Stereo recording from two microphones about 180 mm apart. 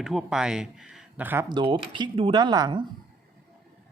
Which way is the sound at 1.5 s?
25° right (ahead or behind).